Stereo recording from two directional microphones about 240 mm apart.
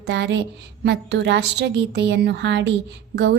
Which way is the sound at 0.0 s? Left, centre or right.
Right.